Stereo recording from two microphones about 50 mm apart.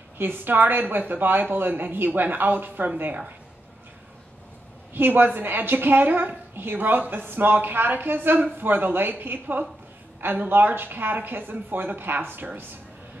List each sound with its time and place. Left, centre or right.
0.2 s a woman's voice: right
4.9 s a woman's voice: right